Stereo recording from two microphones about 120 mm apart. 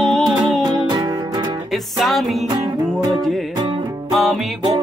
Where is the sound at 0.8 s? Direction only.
35° right (ahead or behind).